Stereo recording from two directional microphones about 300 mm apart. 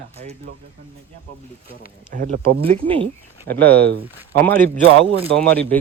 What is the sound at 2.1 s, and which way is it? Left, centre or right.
Speech, right.